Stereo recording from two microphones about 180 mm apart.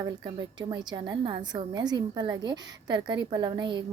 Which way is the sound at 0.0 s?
20° right (ahead or behind).